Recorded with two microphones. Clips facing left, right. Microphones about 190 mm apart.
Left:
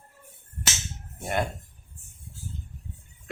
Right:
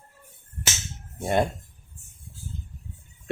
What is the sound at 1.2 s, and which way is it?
Speech, 25° right (ahead or behind).